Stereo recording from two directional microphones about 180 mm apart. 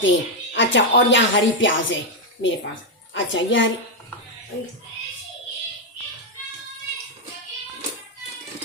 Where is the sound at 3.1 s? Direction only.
90° left.